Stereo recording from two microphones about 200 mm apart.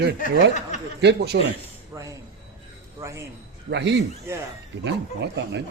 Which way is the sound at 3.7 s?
60° right (ahead or behind).